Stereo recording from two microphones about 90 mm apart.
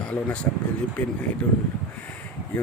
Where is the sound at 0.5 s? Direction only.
20° left (ahead or behind).